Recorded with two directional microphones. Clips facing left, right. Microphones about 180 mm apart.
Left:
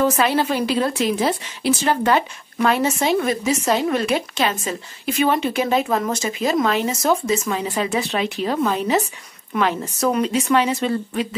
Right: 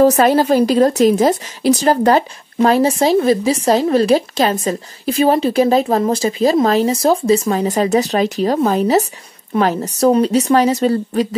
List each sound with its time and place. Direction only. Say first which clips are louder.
0.0 s a woman's voice: right 7 dB; 40° right (ahead or behind)